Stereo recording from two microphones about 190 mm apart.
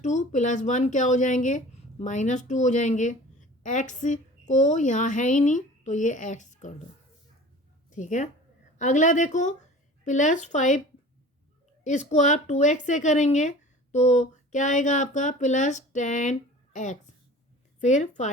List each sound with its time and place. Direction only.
0.0 s speech: 40° left (ahead or behind)
7.9 s a woman's voice: 40° left (ahead or behind)
11.8 s speech: 40° left (ahead or behind)